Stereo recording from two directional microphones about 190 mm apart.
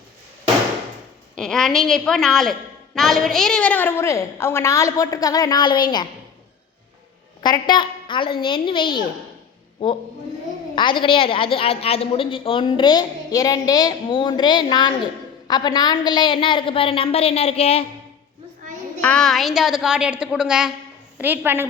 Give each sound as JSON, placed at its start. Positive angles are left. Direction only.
{"t": 1.4, "sound": "a woman's voice", "side_deg": 0}
{"t": 7.4, "sound": "a woman's voice", "side_deg": 25}
{"t": 10.8, "sound": "a woman's voice", "side_deg": 25}
{"t": 19.0, "sound": "a woman's voice", "side_deg": 5}